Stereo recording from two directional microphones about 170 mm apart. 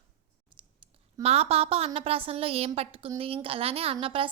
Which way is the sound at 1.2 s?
35° right (ahead or behind).